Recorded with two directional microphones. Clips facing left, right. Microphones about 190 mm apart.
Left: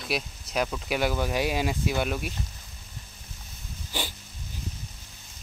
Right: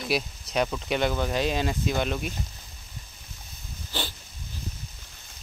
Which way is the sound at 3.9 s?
10° left (ahead or behind).